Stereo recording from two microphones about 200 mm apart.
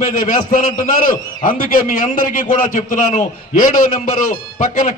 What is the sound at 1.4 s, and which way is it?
A man's voice, 35° left (ahead or behind).